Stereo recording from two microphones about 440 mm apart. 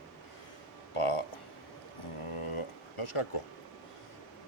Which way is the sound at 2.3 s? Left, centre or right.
Left.